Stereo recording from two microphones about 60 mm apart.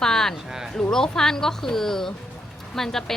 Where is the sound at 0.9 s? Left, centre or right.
Centre.